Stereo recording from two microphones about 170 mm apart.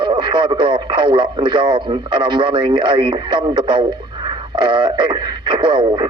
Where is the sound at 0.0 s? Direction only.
25° right (ahead or behind).